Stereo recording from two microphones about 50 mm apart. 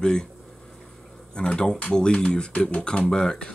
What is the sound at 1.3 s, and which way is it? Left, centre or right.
Speech, centre.